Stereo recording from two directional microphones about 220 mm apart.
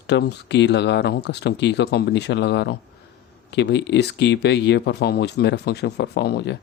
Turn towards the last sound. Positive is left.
turn(degrees=50)  # may be behind; listen again after turning